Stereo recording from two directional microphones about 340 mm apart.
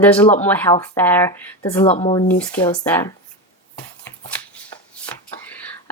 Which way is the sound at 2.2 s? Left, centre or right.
Centre.